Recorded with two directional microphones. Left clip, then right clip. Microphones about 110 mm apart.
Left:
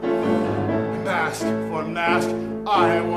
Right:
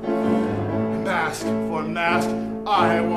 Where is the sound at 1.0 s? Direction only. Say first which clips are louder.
Even; centre (ahead or behind).